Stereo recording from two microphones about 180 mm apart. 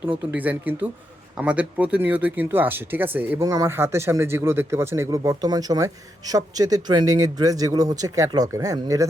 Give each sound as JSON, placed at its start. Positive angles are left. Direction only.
{"t": 0.3, "sound": "speech", "side_deg": -10}